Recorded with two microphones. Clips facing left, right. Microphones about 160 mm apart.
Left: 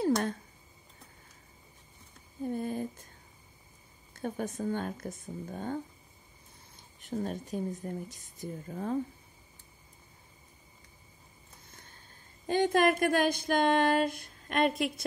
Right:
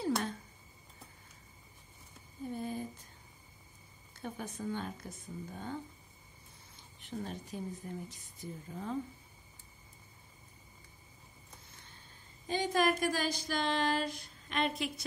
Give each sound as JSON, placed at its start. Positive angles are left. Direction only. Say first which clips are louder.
{"t": 2.5, "sound": "a sound", "louder": "left 4 dB", "side_deg": 50}
{"t": 4.1, "sound": "a woman's voice", "louder": "left 7 dB", "side_deg": 50}
{"t": 7.0, "sound": "a woman's voice", "louder": "left 6 dB", "side_deg": 45}
{"t": 12.4, "sound": "speech", "louder": "left 5 dB", "side_deg": 55}